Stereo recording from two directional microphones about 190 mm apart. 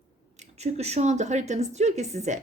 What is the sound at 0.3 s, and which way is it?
A woman's voice, 35° right (ahead or behind).